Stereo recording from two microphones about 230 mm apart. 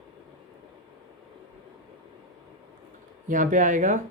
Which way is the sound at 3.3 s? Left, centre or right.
Right.